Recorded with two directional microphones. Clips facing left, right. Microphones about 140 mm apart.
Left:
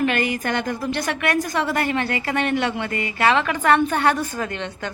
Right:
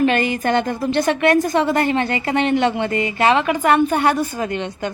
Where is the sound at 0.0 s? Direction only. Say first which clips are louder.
Right 4 dB; 25° right (ahead or behind).